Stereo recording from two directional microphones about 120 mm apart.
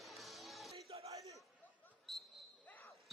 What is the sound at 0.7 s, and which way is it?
Crowd, 55° right (ahead or behind).